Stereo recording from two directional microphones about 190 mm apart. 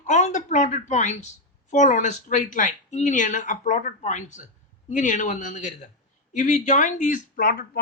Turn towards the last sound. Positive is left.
turn(degrees=50)  # may be behind; listen again after turning